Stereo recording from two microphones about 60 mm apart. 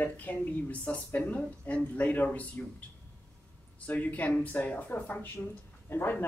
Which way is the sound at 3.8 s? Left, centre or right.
Left.